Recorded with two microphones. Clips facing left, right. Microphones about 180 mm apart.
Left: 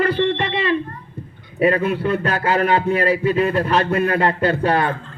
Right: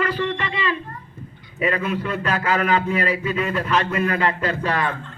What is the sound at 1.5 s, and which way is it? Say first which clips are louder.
A man's voice: left 6 dB; 35° left (ahead or behind).